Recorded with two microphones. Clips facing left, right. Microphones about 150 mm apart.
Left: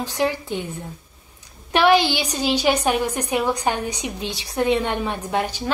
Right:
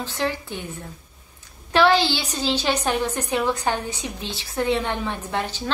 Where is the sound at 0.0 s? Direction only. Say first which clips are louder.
Left 4 dB; 15° left (ahead or behind).